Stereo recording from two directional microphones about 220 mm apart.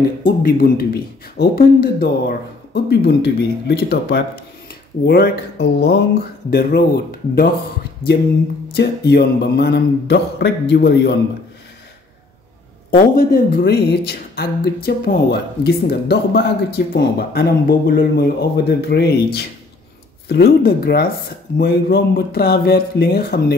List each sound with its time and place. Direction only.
0.2 s speech: 40° left (ahead or behind)
8.7 s speech: 50° left (ahead or behind)
12.9 s speech: 40° left (ahead or behind)